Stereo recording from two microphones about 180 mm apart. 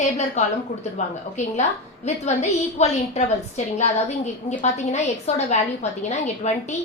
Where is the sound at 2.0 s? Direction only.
40° left (ahead or behind).